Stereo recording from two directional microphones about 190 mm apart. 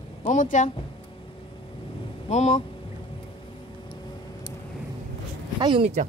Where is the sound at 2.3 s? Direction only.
35° left (ahead or behind).